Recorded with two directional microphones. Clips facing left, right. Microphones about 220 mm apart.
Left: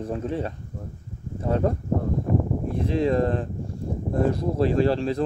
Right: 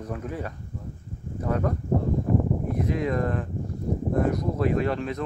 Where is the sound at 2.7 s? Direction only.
30° left (ahead or behind).